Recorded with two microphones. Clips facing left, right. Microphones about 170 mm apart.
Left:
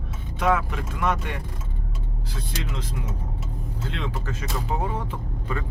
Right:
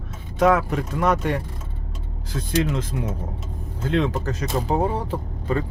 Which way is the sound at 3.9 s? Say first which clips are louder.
Right 12 dB; 45° right (ahead or behind).